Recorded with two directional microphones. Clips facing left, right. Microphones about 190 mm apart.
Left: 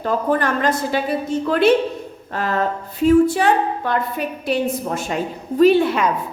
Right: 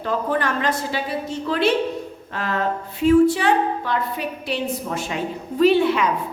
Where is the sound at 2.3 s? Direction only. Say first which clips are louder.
Left 3 dB; 40° left (ahead or behind).